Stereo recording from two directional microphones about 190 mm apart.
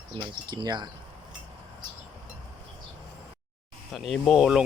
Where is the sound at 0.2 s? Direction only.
20° right (ahead or behind).